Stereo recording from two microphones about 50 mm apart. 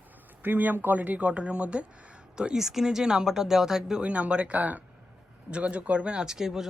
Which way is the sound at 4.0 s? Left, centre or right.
Right.